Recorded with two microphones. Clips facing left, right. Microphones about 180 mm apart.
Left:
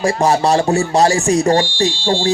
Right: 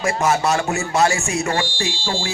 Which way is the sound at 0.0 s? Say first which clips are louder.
Left 5 dB; 35° left (ahead or behind).